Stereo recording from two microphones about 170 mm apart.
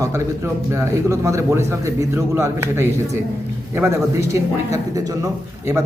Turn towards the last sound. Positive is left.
turn(degrees=-20)  # may be behind; listen again after turning